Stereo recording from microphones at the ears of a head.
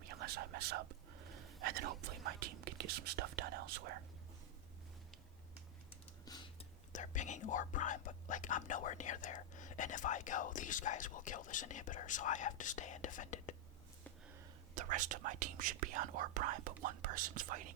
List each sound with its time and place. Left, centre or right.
0.0 s speech: right
6.9 s speech: left
14.8 s speech: right